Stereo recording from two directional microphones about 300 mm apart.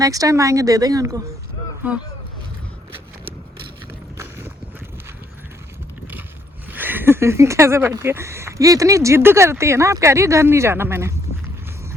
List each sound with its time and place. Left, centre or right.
0.0 s speech: centre
4.2 s clip-clop: centre
6.7 s speech: centre